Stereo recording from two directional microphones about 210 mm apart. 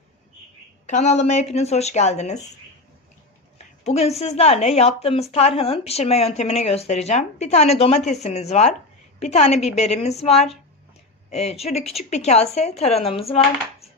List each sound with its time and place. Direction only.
0.9 s a woman's voice: 35° left (ahead or behind)
3.8 s a woman's voice: 30° left (ahead or behind)